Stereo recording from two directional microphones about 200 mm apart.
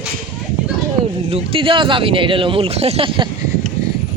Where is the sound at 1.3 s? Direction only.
25° right (ahead or behind).